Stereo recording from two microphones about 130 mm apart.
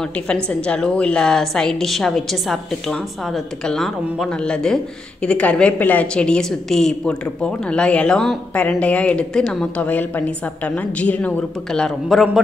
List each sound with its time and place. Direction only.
0.0 s a woman's voice: 5° left (ahead or behind)